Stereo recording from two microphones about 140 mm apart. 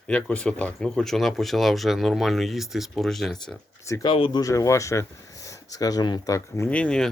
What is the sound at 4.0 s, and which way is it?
Speech, 35° left (ahead or behind).